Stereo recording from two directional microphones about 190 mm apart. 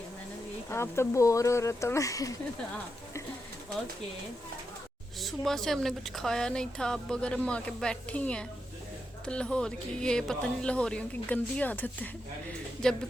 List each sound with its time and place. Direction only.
0.7 s speech: 15° left (ahead or behind)
5.2 s speech: centre (ahead or behind)